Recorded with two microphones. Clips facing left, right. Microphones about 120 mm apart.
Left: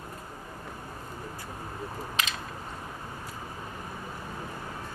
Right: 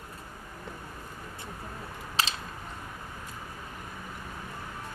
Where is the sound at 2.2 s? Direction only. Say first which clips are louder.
Right 2 dB; 35° right (ahead or behind).